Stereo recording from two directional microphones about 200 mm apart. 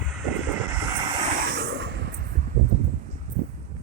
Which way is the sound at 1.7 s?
65° right (ahead or behind).